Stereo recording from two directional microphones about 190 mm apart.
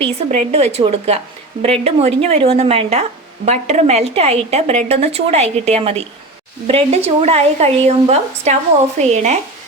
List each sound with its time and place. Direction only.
0.3 s speech: 30° right (ahead or behind)